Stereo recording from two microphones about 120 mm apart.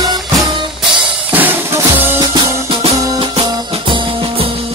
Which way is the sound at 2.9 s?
30° right (ahead or behind).